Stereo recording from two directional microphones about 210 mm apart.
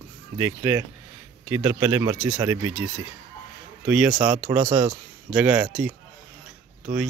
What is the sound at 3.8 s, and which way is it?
Speech, 5° right (ahead or behind).